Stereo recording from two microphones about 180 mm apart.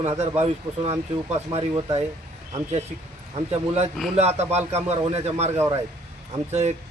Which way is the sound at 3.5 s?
35° right (ahead or behind).